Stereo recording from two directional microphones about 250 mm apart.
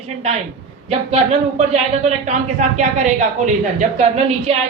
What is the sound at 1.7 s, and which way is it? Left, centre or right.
Speech, right.